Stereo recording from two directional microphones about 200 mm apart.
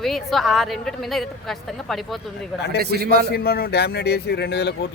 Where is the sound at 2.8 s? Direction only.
50° right (ahead or behind).